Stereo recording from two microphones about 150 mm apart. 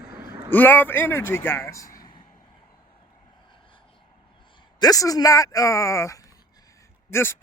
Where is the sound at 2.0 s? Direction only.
30° left (ahead or behind).